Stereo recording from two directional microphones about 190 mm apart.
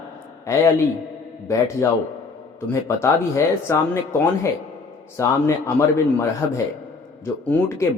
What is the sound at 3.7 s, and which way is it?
Speech, 15° left (ahead or behind).